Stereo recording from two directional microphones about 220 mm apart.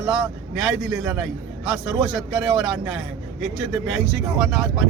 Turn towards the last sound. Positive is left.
turn(degrees=0)  # may be behind; listen again after turning